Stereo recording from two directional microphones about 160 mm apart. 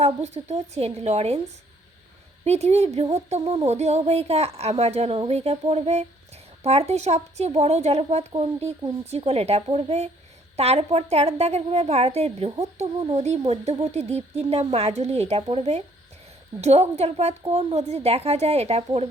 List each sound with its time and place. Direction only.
0.0 s a woman's voice: 45° right (ahead or behind)
2.4 s a woman's voice: 40° right (ahead or behind)